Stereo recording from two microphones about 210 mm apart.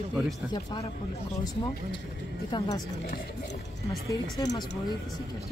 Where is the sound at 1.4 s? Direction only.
20° left (ahead or behind).